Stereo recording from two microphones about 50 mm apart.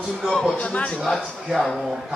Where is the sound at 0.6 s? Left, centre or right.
Left.